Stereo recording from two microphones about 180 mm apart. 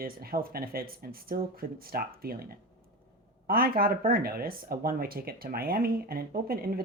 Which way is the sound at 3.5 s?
55° right (ahead or behind).